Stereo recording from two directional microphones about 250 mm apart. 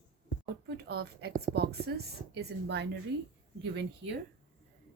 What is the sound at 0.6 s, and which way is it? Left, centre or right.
A woman's voice, right.